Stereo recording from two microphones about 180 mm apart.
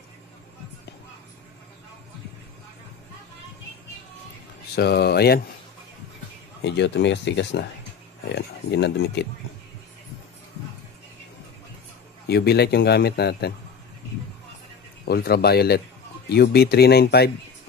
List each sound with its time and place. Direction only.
4.7 s a man's voice: 65° left (ahead or behind)
6.6 s speech: 75° left (ahead or behind)
12.3 s a man's voice: 65° left (ahead or behind)
15.0 s a man's voice: 60° left (ahead or behind)